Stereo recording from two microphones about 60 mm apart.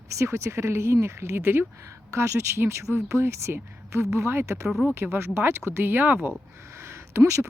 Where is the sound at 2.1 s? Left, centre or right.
Right.